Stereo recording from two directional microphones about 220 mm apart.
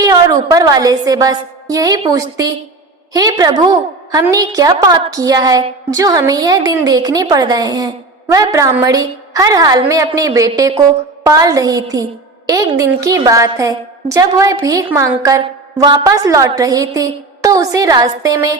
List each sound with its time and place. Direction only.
0.0 s a woman's voice: 15° right (ahead or behind)